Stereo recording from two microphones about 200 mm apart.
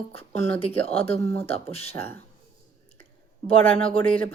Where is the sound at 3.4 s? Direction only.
30° left (ahead or behind).